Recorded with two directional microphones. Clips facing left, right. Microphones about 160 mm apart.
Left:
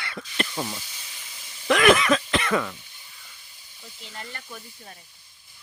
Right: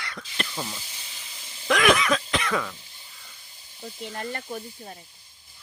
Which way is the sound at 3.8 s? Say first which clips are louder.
Right 8 dB; 45° right (ahead or behind).